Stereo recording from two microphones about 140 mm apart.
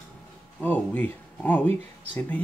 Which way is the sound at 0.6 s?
10° left (ahead or behind).